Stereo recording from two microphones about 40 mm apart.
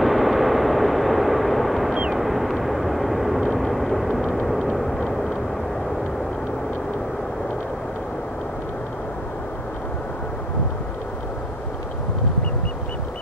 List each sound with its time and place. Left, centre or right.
0.0 s vehicle: centre